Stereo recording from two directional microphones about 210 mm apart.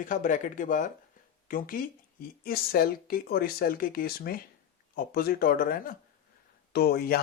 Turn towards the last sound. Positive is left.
turn(degrees=50)  # may be behind; listen again after turning